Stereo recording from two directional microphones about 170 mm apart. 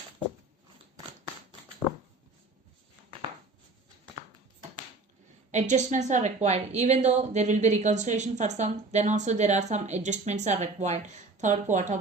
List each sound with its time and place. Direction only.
5.5 s a woman's voice: 45° right (ahead or behind)